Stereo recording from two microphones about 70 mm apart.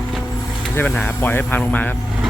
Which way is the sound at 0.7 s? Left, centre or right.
Left.